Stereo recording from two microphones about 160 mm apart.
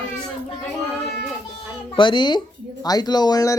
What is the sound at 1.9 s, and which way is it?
Speech, 30° left (ahead or behind).